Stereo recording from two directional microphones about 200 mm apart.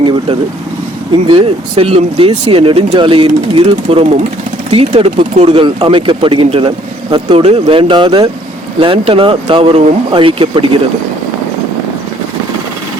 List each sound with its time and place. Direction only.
1.3 s speech: 25° right (ahead or behind)